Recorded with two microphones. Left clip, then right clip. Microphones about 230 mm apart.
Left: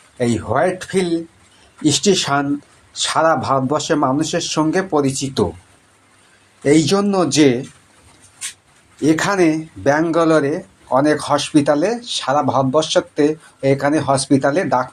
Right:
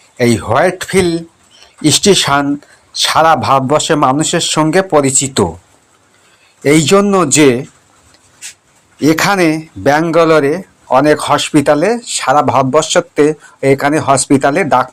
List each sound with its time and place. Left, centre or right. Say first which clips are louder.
0.2 s speech: right 6 dB; right
6.6 s speech: right 6 dB; right
9.0 s speech: right 5 dB; right